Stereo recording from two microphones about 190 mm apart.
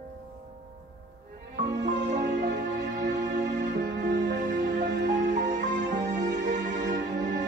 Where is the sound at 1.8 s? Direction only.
65° right (ahead or behind).